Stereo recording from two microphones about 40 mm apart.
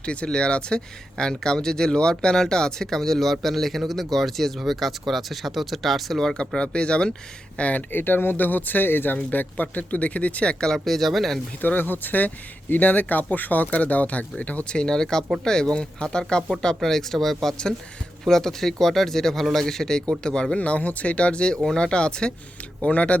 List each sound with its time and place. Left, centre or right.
0.0 s speech: left; by 6.3 s centre
6.3 s speech: left
7.6 s speech: left
7.9 s speech: left
9.1 s speech: left
10.8 s speech: centre
11.6 s speech: left
13.7 s speech: left
14.7 s speech: centre
20.6 s speech: left
22.8 s speech: left